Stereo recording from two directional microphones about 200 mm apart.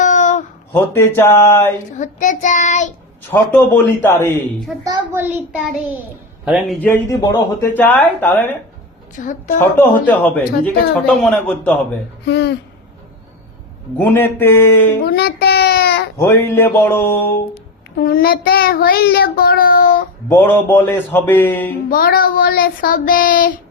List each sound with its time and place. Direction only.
0.0 s a sound: 40° left (ahead or behind)
0.7 s speech: 10° left (ahead or behind)
2.0 s child singing: 40° left (ahead or behind)
3.2 s speech: 10° left (ahead or behind)
4.8 s a child's voice: 20° right (ahead or behind); by 8.5 s 10° left (ahead or behind)
9.1 s child singing: 40° left (ahead or behind)
9.7 s a man's voice: 10° left (ahead or behind)
12.2 s speech: 60° left (ahead or behind)
14.0 s speech: 10° left (ahead or behind)
15.0 s child singing: 50° left (ahead or behind)
16.1 s speech: 10° left (ahead or behind)
18.0 s child singing: 50° left (ahead or behind)
20.2 s speech: 10° left (ahead or behind)
21.8 s child singing: 50° left (ahead or behind)